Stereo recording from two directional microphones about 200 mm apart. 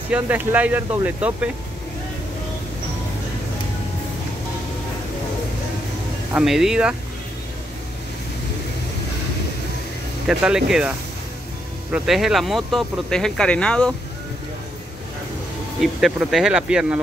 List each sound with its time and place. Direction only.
0.1 s speech: 10° right (ahead or behind)
6.3 s speech: centre (ahead or behind)
10.2 s speech: 5° right (ahead or behind)
11.9 s speech: centre (ahead or behind)
15.8 s speech: centre (ahead or behind)